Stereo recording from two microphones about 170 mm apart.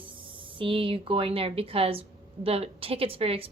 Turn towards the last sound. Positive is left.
turn(degrees=-35)  # may be behind; listen again after turning